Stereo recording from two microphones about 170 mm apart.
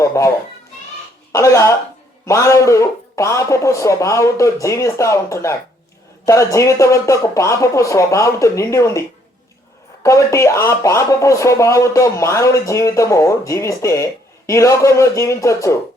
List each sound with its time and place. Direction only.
0.0 s children playing: 15° left (ahead or behind)
1.3 s speech: 20° left (ahead or behind)